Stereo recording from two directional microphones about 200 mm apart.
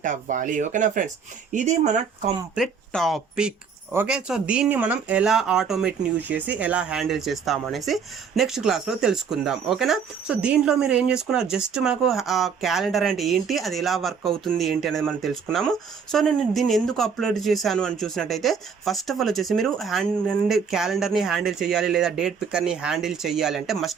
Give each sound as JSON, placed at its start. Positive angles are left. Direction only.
{"t": 0.0, "sound": "speech", "side_deg": -40}
{"t": 2.6, "sound": "speech", "side_deg": 0}